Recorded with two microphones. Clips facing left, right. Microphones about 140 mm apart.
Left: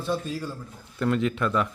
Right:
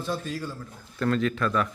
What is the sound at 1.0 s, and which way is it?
Speech, 15° left (ahead or behind).